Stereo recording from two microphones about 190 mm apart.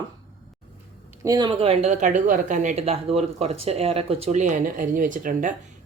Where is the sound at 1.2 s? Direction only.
20° right (ahead or behind).